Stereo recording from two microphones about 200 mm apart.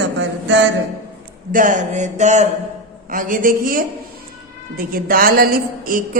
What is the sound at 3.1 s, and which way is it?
A woman's voice, 40° right (ahead or behind).